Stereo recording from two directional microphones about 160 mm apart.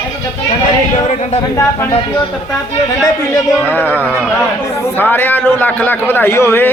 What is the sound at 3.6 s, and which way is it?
Speech, 10° left (ahead or behind).